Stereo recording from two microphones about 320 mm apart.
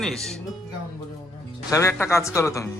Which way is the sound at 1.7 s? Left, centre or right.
Centre.